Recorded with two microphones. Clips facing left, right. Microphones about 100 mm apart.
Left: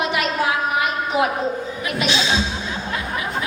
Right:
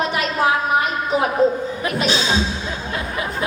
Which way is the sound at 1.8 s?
40° right (ahead or behind).